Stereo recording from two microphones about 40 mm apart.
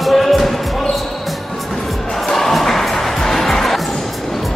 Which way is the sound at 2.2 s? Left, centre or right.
Centre.